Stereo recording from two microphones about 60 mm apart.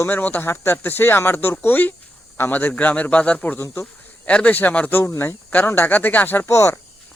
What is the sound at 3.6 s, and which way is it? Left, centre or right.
Speech, left.